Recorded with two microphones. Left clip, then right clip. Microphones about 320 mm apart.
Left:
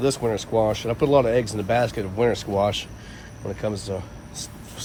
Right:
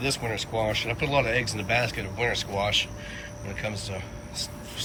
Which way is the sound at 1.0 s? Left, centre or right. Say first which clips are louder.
Left 7 dB; centre.